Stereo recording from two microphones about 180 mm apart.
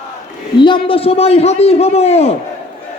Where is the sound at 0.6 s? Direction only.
30° left (ahead or behind).